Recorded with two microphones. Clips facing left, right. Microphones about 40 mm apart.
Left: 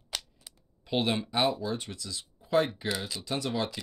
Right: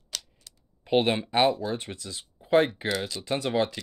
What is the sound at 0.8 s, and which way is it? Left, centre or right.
Speech, right.